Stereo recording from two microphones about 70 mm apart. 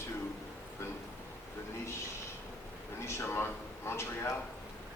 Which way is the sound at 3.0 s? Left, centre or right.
Left.